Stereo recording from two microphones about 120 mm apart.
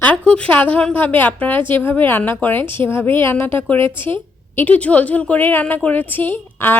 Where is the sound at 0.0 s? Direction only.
10° left (ahead or behind).